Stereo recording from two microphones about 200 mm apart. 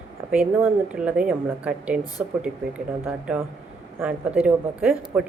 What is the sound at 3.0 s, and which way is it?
Speech, 10° right (ahead or behind).